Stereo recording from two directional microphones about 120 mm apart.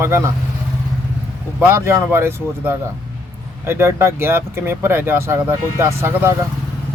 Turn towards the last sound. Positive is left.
turn(degrees=-25)  # may be behind; listen again after turning